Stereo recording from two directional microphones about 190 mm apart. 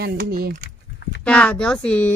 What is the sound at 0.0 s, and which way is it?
Speech, 55° right (ahead or behind).